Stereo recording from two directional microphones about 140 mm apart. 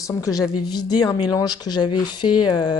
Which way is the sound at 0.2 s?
25° left (ahead or behind).